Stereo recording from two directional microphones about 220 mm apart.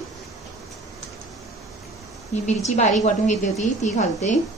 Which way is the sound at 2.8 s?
35° left (ahead or behind).